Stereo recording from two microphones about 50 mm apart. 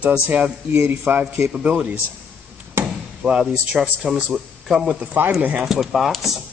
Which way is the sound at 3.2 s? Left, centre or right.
Centre.